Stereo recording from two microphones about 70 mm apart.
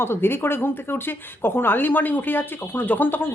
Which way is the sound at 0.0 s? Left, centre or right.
Left.